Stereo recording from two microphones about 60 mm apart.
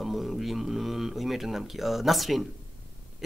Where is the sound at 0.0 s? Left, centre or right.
Centre.